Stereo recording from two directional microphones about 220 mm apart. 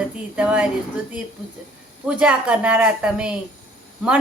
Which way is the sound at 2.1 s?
5° right (ahead or behind).